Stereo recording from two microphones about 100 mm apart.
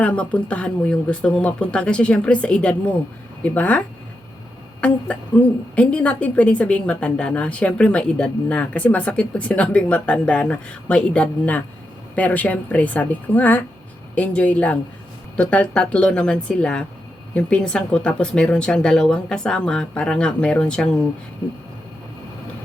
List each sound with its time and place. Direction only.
0.0 s a woman's voice: 15° left (ahead or behind)